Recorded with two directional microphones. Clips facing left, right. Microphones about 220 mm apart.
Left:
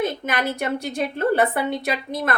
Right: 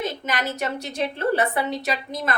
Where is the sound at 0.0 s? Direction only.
55° left (ahead or behind).